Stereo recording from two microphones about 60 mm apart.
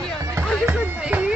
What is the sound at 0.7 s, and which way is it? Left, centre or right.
Music, right.